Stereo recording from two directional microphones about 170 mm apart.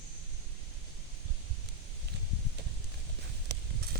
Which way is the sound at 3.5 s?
80° right.